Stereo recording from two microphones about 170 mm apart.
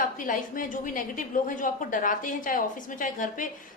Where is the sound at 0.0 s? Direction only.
50° left (ahead or behind).